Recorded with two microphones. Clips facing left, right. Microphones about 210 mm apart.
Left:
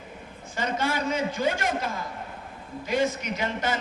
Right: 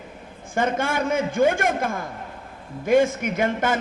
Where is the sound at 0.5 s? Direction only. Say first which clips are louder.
Right 5 dB; 50° right (ahead or behind).